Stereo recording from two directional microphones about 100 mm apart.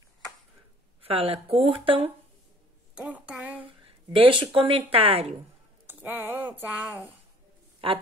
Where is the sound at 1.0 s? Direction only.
75° right (ahead or behind).